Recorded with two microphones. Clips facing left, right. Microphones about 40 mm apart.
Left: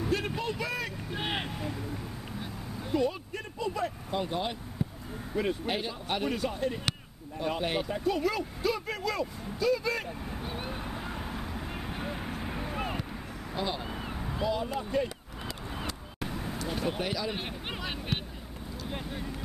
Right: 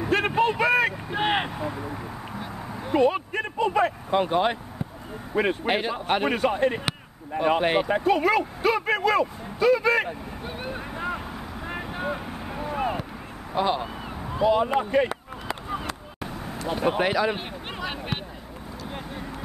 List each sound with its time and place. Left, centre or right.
0.1 s vehicle: right
1.1 s vehicle: right
2.9 s vehicle: right
5.3 s speech: right
10.4 s vehicle: centre
11.1 s vehicle: centre
11.8 s vehicle: centre
12.2 s vehicle: centre
13.6 s speech: right
13.8 s a sound: centre
14.4 s speech: right
16.2 s vehicle: centre
17.0 s speech: right
17.4 s a sound: centre